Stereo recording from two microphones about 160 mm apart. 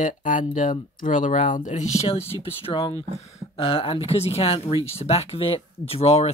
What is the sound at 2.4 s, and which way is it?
Speech, 35° left (ahead or behind).